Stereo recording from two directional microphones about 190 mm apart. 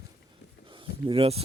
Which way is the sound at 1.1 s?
30° right (ahead or behind).